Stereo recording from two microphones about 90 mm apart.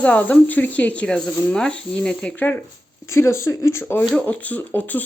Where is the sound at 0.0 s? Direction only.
15° left (ahead or behind).